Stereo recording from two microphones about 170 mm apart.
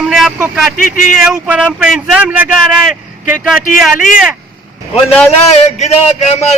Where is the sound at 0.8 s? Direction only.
55° left (ahead or behind).